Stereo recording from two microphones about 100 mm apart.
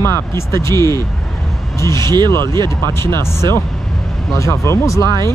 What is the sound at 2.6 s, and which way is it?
Speech, 25° left (ahead or behind).